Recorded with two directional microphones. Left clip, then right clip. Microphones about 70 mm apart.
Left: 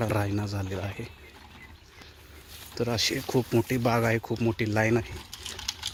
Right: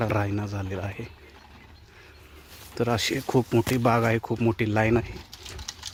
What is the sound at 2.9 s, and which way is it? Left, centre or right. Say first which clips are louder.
Speech: right 1 dB; right.